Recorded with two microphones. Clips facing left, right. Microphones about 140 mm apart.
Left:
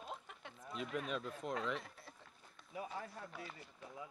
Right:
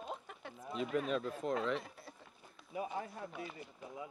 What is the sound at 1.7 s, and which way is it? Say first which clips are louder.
Run: right 5 dB; 5° right (ahead or behind).